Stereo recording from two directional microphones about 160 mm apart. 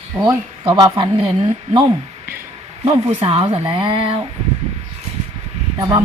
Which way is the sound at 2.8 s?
35° right (ahead or behind).